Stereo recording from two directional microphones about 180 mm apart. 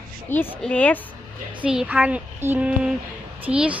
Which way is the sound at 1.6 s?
5° right (ahead or behind).